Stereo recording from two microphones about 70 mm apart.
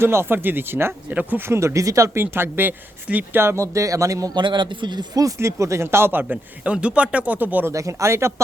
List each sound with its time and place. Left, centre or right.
0.0 s speech: right
1.1 s speech: right
1.4 s speech: right
3.4 s speech: right
4.4 s speech: right
5.2 s speech: right
6.2 s speech: centre
7.7 s speech: right